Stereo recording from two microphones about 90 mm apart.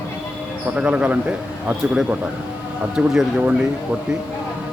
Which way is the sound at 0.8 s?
15° right (ahead or behind).